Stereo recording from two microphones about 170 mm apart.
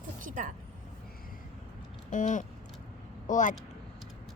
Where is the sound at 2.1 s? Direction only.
50° left (ahead or behind).